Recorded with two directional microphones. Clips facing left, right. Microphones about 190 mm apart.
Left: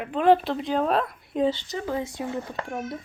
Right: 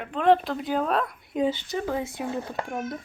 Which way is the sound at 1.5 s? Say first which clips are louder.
Even; 15° right (ahead or behind).